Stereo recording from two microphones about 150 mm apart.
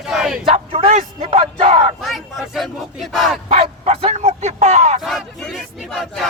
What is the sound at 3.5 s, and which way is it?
Bow-wow, 45° right (ahead or behind).